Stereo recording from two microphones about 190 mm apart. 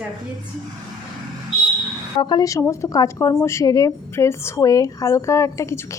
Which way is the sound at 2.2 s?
20° left (ahead or behind).